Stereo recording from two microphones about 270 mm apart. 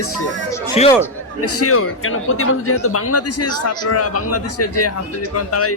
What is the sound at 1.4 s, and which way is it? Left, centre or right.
A man's voice, left.